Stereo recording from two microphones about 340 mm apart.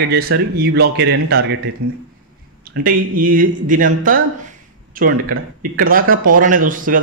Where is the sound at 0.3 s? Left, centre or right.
Right.